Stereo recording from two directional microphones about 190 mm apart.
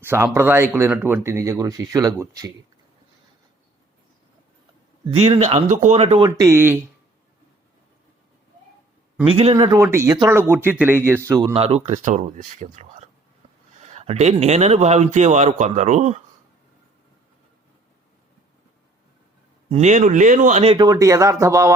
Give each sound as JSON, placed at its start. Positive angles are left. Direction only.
{"t": 0.0, "sound": "speech", "side_deg": -10}
{"t": 5.1, "sound": "speech", "side_deg": -35}
{"t": 9.2, "sound": "speech", "side_deg": -30}
{"t": 11.5, "sound": "speech", "side_deg": -30}
{"t": 19.7, "sound": "speech", "side_deg": -35}